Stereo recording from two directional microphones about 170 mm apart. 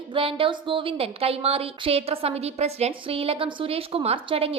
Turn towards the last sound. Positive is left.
turn(degrees=-35)  # may be behind; listen again after turning